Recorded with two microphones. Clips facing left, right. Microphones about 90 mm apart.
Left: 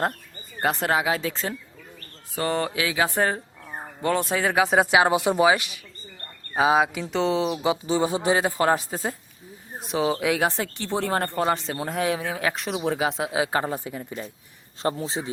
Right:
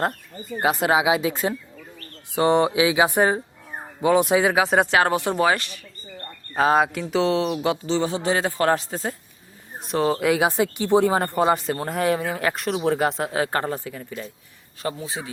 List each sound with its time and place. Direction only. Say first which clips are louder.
0.6 s speech: right 3 dB; 5° right (ahead or behind)
4.5 s speech: right 1 dB; centre (ahead or behind)
4.9 s a man's voice: left 1 dB; 15° left (ahead or behind)
7.9 s a man's voice: left 2 dB; 15° left (ahead or behind)
13.8 s speech: even; 20° left (ahead or behind)